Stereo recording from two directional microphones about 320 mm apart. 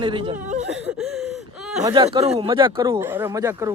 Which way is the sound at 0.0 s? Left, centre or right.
Centre.